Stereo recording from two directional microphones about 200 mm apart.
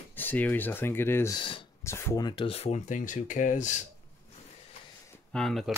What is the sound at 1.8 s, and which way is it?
Speech, 15° left (ahead or behind).